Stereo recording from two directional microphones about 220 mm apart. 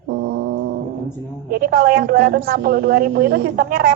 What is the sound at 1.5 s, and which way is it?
Speech, 40° right (ahead or behind).